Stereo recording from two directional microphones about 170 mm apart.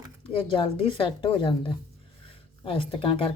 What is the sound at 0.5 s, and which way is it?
Speech, 30° left (ahead or behind).